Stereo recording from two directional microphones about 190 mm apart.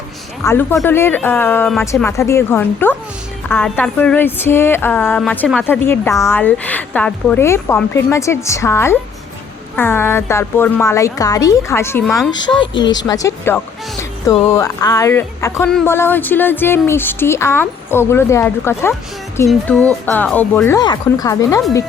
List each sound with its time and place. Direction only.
0.4 s speech: 15° left (ahead or behind)
12.0 s speech: centre (ahead or behind)
12.8 s speech: 20° left (ahead or behind)